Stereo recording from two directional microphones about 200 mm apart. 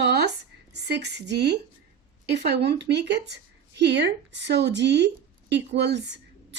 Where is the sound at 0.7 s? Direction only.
60° right (ahead or behind).